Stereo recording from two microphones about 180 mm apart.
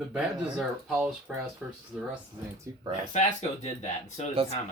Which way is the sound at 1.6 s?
5° right (ahead or behind).